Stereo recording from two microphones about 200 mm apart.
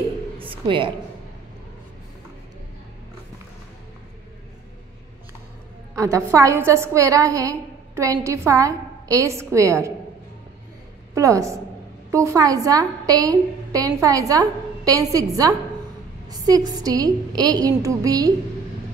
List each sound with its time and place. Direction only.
0.4 s a sound: 25° right (ahead or behind)
5.9 s a woman's voice: 15° right (ahead or behind)
11.1 s a woman's voice: 15° right (ahead or behind)